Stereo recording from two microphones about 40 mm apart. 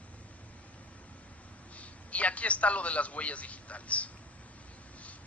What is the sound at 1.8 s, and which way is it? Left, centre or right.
A man's voice, left.